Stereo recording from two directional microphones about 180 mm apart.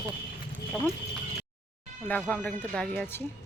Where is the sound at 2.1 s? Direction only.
5° left (ahead or behind).